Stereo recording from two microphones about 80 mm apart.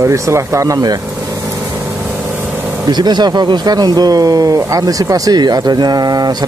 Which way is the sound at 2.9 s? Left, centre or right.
Right.